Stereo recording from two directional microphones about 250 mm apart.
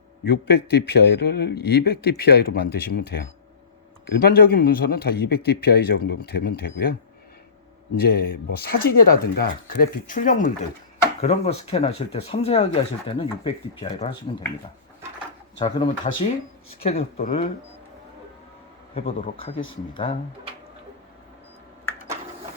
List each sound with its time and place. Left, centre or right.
0.3 s a man's voice: left
7.9 s a man's voice: left
15.5 s speech: centre
18.9 s speech: left